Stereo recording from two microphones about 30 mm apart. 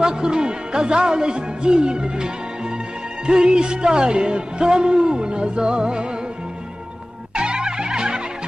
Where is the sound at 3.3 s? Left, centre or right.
Right.